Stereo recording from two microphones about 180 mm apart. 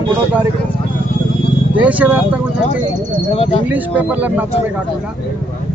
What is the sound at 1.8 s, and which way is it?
Speech, 10° right (ahead or behind).